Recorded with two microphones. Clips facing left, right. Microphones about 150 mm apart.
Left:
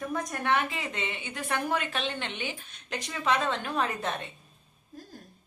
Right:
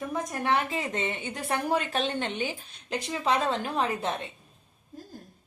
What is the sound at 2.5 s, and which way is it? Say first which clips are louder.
A woman's voice: right 4 dB; 30° right (ahead or behind).